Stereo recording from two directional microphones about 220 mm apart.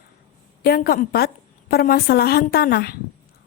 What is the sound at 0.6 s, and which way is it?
A woman's voice, 45° left (ahead or behind).